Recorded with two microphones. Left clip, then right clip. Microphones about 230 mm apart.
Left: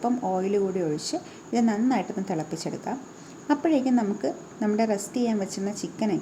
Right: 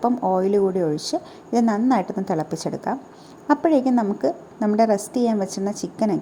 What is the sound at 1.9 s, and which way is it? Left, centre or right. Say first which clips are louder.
A woman's voice: right 6 dB; centre.